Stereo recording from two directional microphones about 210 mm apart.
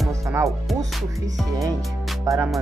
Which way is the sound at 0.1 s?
15° right (ahead or behind).